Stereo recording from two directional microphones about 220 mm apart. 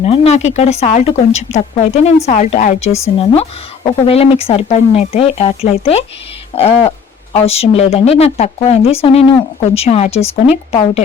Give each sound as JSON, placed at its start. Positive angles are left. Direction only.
{"t": 0.0, "sound": "speech", "side_deg": 30}
{"t": 4.0, "sound": "speech", "side_deg": 25}